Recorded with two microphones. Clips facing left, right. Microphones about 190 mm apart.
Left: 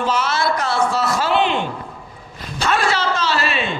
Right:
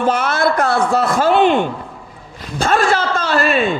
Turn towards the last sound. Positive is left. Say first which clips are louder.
# right 6 dB
turn(degrees=-50)  # may be behind; listen again after turning